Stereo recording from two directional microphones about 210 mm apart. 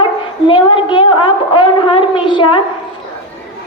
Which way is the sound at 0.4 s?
25° left (ahead or behind).